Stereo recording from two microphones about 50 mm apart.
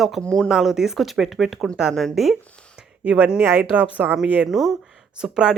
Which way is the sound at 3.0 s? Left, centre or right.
Right.